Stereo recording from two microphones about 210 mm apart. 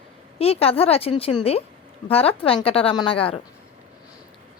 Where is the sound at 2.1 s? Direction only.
25° left (ahead or behind).